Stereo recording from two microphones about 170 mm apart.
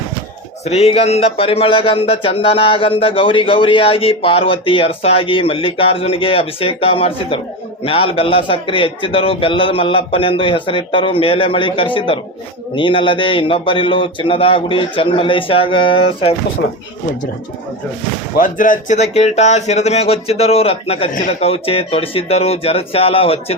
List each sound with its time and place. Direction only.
0.6 s speech: 40° left (ahead or behind)
18.3 s speech: 50° left (ahead or behind); by 23.6 s 35° left (ahead or behind)